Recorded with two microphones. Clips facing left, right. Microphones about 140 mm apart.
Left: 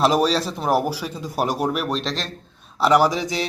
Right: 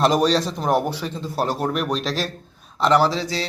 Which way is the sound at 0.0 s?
Centre (ahead or behind).